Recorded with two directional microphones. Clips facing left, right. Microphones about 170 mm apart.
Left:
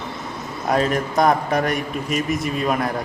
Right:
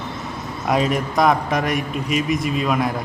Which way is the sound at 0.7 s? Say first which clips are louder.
Even; centre (ahead or behind).